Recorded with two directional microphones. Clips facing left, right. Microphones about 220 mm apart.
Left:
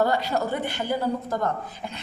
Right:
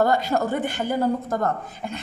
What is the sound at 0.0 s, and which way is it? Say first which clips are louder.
A woman's voice: right 3 dB; 50° right (ahead or behind).